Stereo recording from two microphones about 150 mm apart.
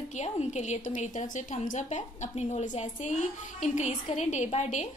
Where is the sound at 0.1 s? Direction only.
50° left (ahead or behind).